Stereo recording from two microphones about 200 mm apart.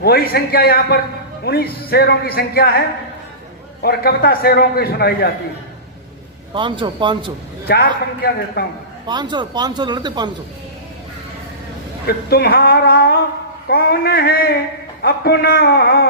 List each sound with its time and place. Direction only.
0.0 s a man's voice: 50° left (ahead or behind)
3.8 s a man's voice: 50° left (ahead or behind)
6.5 s speech: 25° right (ahead or behind)
7.7 s a man's voice: 50° left (ahead or behind)
9.0 s speech: 20° right (ahead or behind)
12.0 s a man's voice: 50° left (ahead or behind)